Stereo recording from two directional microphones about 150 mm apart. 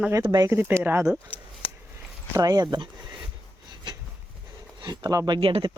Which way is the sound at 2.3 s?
25° right (ahead or behind).